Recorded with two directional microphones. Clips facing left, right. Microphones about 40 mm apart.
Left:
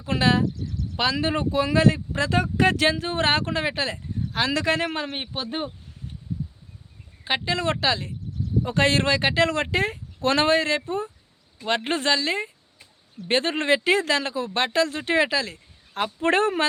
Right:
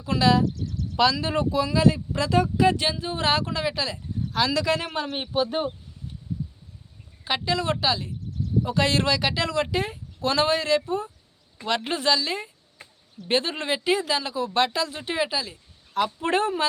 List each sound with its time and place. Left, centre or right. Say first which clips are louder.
0.0 s speech: right 1 dB; left
2.6 s speech: left 2 dB; left
7.3 s speech: left 1 dB; left
11.9 s speech: left 1 dB; left